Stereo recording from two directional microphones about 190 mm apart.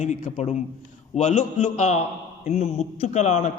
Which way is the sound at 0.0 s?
40° left (ahead or behind).